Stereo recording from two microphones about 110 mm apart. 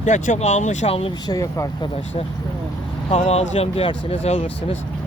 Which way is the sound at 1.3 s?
30° left (ahead or behind).